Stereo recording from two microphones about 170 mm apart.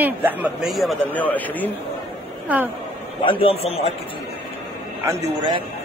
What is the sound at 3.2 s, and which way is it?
Speech, 35° left (ahead or behind).